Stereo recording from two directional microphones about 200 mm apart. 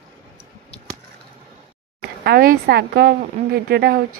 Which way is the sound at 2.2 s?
50° right (ahead or behind).